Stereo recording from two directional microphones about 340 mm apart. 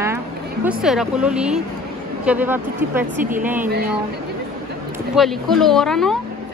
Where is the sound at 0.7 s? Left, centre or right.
Centre.